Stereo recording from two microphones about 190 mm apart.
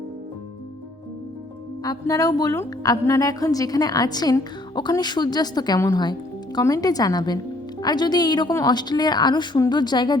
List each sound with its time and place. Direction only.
1.8 s a woman's voice: 20° left (ahead or behind)